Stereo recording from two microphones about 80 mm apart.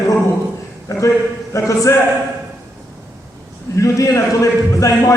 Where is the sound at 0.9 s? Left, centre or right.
Left.